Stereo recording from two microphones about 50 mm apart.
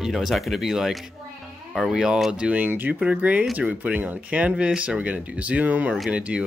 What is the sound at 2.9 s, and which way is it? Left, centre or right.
Speech, right.